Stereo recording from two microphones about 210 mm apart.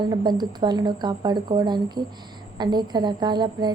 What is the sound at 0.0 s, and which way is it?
A woman's voice, 20° right (ahead or behind).